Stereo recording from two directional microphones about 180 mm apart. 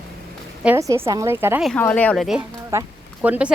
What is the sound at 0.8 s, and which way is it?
Speech, 15° right (ahead or behind).